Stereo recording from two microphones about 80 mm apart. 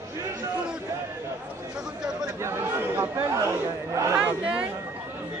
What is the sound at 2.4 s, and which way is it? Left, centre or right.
Chatter, right.